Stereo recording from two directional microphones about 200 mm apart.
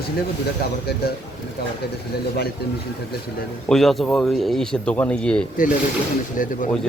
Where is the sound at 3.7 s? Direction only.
Centre (ahead or behind).